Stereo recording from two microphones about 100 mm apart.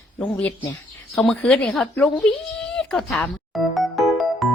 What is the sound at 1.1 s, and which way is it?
Speech, 5° left (ahead or behind).